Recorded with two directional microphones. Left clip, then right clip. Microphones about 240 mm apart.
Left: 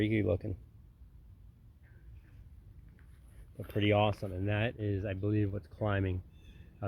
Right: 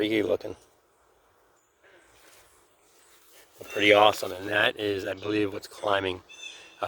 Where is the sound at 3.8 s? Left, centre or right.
Centre.